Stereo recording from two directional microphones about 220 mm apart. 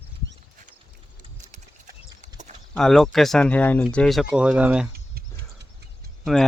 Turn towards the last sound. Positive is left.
turn(degrees=0)  # may be behind; listen again after turning